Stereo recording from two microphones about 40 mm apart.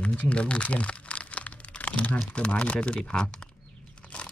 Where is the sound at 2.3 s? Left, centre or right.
Left.